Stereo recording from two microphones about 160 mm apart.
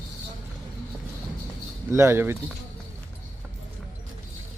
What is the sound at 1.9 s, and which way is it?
Speech, 15° right (ahead or behind).